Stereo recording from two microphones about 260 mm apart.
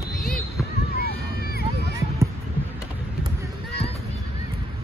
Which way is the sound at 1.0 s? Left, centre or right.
Left.